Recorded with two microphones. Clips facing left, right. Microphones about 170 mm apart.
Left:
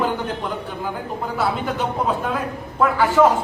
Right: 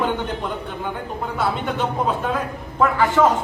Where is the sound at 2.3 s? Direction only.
5° left (ahead or behind).